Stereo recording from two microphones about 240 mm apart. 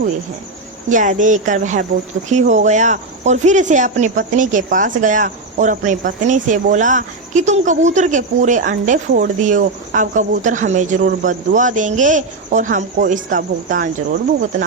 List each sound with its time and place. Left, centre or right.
0.9 s speech: right